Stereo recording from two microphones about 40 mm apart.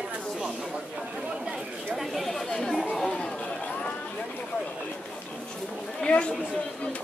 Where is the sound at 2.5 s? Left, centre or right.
Centre.